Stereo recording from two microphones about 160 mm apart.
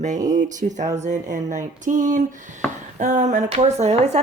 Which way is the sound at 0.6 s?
45° right (ahead or behind).